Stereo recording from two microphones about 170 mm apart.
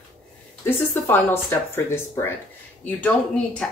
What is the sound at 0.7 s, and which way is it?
Speech, 10° left (ahead or behind).